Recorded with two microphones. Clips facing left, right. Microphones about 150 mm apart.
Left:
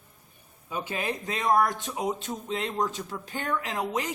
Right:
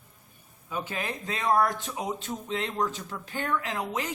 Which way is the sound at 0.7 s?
20° left (ahead or behind).